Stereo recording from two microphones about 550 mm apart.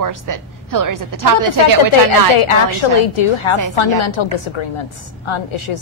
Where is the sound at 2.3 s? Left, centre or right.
Left.